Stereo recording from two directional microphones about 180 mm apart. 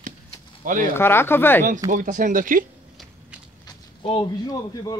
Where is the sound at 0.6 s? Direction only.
50° right (ahead or behind).